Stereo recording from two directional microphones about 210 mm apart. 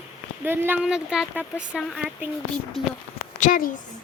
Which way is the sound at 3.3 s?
40° left (ahead or behind).